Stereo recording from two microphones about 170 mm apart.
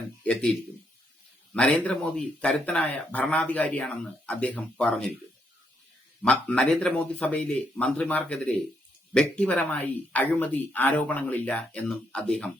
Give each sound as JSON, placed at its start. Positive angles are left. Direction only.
{"t": 1.5, "sound": "speech", "side_deg": 5}
{"t": 6.2, "sound": "speech", "side_deg": 5}